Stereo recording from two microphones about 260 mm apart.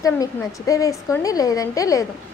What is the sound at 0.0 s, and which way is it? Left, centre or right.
A woman's voice, centre.